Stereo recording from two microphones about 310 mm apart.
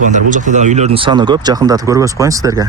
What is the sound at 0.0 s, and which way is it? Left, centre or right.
Speech, right.